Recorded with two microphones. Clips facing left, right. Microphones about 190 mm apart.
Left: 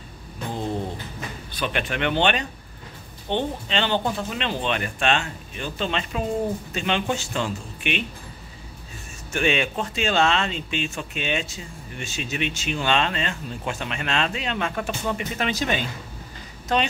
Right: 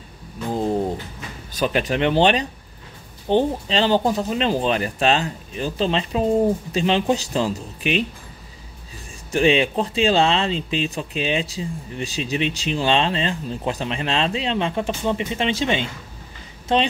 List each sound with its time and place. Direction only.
0.5 s pigeon: 40° right (ahead or behind)
1.5 s speech: 40° right (ahead or behind)
9.3 s speech: 30° right (ahead or behind)